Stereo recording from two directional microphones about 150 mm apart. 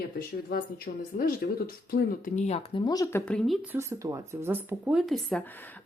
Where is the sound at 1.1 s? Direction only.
70° left (ahead or behind).